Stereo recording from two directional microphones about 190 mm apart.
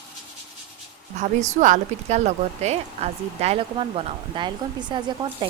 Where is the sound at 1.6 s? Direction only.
40° right (ahead or behind).